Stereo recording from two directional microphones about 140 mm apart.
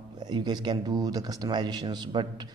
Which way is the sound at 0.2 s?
30° right (ahead or behind).